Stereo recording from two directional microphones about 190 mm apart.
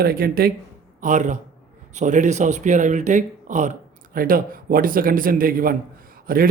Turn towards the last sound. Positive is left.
turn(degrees=-50)  # may be behind; listen again after turning